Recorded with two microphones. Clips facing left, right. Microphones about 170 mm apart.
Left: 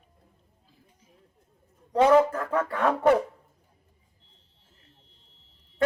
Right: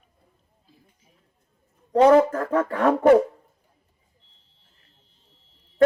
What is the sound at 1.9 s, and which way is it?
Speech, 40° right (ahead or behind).